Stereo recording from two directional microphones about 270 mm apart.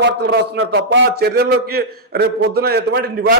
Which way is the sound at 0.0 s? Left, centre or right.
Right.